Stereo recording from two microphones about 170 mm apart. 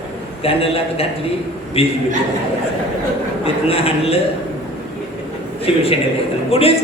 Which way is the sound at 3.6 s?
35° left (ahead or behind).